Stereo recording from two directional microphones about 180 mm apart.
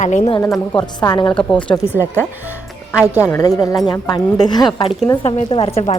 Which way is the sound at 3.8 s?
20° left (ahead or behind).